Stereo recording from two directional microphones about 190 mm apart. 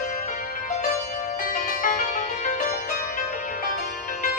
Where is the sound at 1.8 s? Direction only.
40° left (ahead or behind).